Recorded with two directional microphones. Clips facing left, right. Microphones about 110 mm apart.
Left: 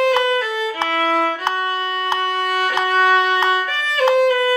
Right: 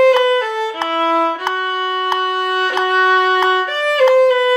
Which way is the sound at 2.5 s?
30° right (ahead or behind).